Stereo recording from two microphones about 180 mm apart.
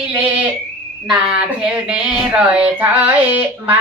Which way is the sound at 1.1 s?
5° right (ahead or behind).